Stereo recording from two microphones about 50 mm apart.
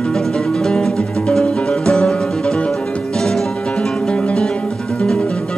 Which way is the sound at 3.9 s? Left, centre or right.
Left.